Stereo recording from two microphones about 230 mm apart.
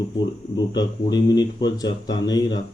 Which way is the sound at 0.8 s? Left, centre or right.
Centre.